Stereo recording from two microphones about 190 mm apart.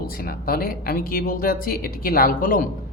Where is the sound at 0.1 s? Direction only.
50° left (ahead or behind).